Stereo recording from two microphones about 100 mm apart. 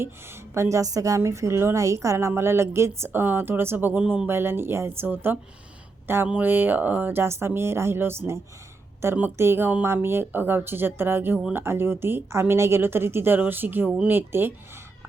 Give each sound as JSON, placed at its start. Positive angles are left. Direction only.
{"t": 0.0, "sound": "a woman's voice", "side_deg": -25}
{"t": 4.3, "sound": "a woman's voice", "side_deg": -25}